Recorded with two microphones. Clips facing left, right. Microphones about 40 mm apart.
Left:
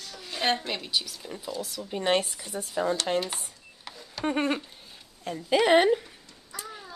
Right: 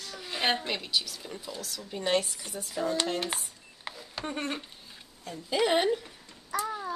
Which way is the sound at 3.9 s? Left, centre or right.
Right.